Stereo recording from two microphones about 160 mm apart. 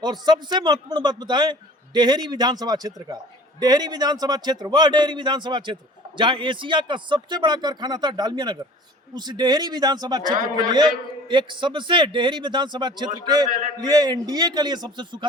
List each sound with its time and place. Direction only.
0.0 s a man's voice: 25° right (ahead or behind)